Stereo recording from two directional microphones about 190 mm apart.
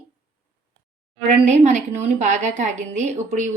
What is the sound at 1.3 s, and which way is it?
A woman's voice, 35° right (ahead or behind).